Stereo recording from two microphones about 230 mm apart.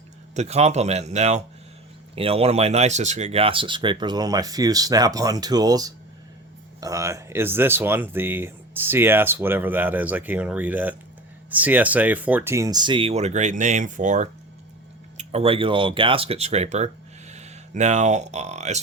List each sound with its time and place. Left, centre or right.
0.3 s speech: right